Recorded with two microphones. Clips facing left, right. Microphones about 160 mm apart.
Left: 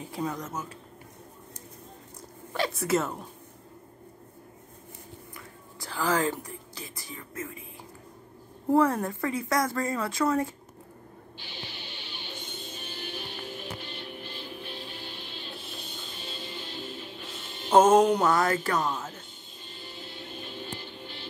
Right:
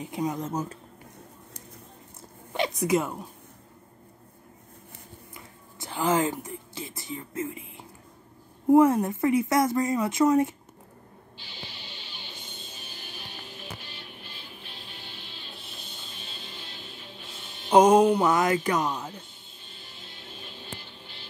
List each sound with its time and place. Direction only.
0.0 s speech: 20° right (ahead or behind)
0.5 s speech: 35° right (ahead or behind)
2.5 s speech: 20° right (ahead or behind)
5.3 s music: 25° right (ahead or behind)
8.6 s speech: 15° right (ahead or behind)
17.6 s mantra: 15° right (ahead or behind)
18.0 s speech: 15° right (ahead or behind)